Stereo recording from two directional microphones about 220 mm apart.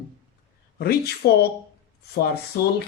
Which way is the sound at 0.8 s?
45° left (ahead or behind).